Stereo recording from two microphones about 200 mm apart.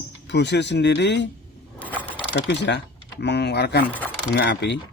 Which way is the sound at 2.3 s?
60° left (ahead or behind).